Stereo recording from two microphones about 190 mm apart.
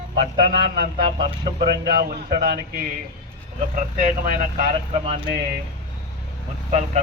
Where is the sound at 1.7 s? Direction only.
55° right (ahead or behind).